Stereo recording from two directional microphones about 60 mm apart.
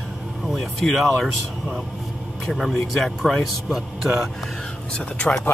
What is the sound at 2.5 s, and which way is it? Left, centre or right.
Speech, centre.